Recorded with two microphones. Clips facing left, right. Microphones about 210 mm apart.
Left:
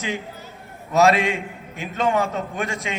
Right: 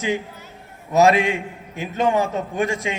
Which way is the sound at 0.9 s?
20° right (ahead or behind).